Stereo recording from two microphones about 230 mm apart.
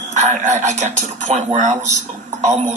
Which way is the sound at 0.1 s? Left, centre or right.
Right.